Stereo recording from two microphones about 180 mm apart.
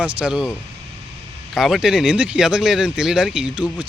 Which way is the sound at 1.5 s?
Centre (ahead or behind).